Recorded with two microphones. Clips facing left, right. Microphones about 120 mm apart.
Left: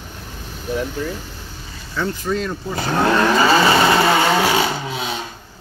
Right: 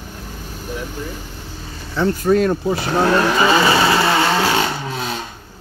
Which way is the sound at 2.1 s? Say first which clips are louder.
Right 10 dB; 50° right (ahead or behind).